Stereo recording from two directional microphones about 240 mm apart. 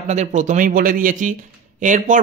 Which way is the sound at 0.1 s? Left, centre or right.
Right.